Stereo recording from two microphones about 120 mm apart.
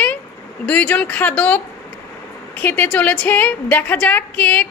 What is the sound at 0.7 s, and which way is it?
A woman's voice, 10° left (ahead or behind).